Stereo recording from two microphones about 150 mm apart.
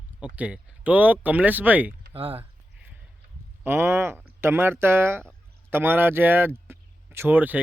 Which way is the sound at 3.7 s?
15° right (ahead or behind).